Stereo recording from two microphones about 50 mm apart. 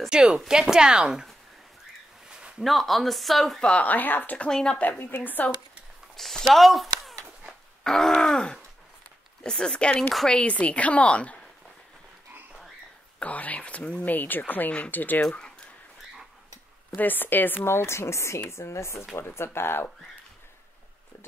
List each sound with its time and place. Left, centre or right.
0.1 s speech: centre
2.6 s speech: centre
3.7 s speech: left
4.5 s groan: centre
4.9 s speech: left
6.1 s speech: centre
7.8 s groan: centre
10.4 s a woman's voice: left
13.2 s speech: left
16.9 s speech: left
17.6 s speech: left
19.1 s speech: left